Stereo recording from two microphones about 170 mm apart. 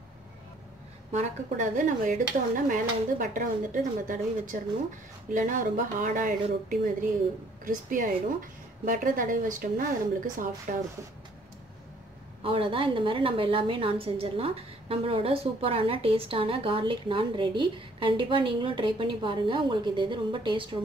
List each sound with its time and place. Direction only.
1.1 s dishes: 45° right (ahead or behind)
12.4 s a woman's voice: 30° right (ahead or behind)